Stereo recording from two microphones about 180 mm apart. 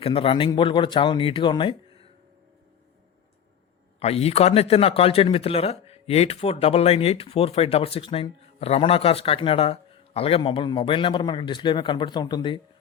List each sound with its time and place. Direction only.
0.0 s speech: 30° left (ahead or behind)
4.0 s speech: 35° left (ahead or behind)